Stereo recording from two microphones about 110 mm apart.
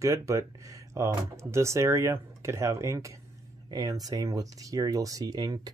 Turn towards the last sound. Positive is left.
turn(degrees=-35)  # may be behind; listen again after turning